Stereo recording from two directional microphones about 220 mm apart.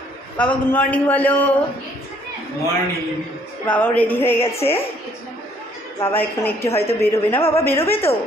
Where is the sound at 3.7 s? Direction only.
5° left (ahead or behind).